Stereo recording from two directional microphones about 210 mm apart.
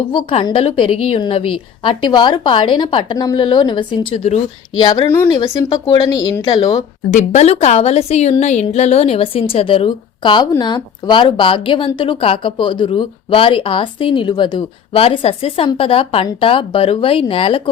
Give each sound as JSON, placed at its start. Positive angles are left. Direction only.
{"t": 0.1, "sound": "a woman's voice", "side_deg": 25}
{"t": 7.1, "sound": "a woman's voice", "side_deg": 35}